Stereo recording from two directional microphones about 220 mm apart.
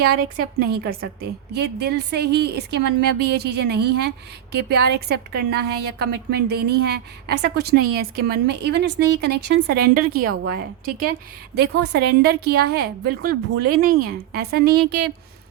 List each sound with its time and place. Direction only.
0.6 s a woman's voice: 45° right (ahead or behind)